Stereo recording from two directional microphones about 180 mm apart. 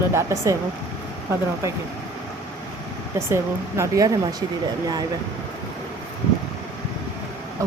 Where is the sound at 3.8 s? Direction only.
20° right (ahead or behind).